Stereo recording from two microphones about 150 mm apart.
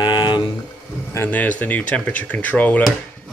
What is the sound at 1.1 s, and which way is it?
Speech, 15° left (ahead or behind).